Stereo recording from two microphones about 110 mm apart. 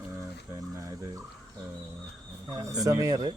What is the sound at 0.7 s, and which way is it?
Speech, 30° right (ahead or behind).